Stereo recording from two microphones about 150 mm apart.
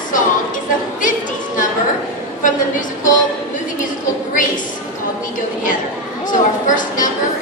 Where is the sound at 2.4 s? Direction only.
60° left (ahead or behind).